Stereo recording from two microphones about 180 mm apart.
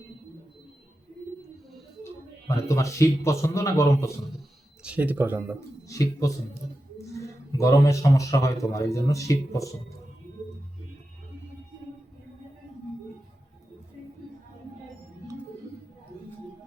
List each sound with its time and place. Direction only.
2.0 s speech: 15° left (ahead or behind)
4.8 s speech: 10° right (ahead or behind)
5.5 s speech: 20° left (ahead or behind)